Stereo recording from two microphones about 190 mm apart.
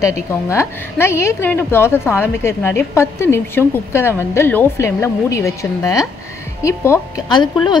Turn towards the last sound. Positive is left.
turn(degrees=25)  # may be behind; listen again after turning